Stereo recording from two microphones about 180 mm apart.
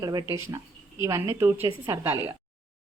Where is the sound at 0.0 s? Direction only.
20° right (ahead or behind).